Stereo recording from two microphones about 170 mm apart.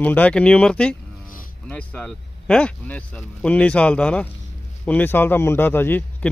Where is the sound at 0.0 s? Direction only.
10° left (ahead or behind).